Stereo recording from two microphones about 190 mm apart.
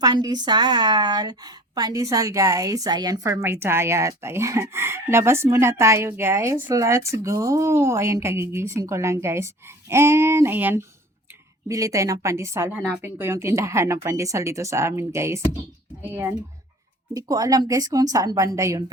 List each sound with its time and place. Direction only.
0.0 s a woman's voice: 20° right (ahead or behind)